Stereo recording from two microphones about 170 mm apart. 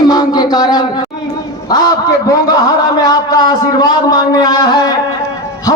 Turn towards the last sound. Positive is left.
turn(degrees=25)  # may be behind; listen again after turning